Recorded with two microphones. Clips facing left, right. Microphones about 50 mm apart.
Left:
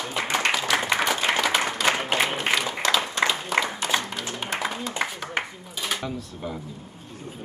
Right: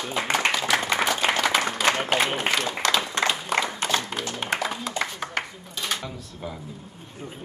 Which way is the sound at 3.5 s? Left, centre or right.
Centre.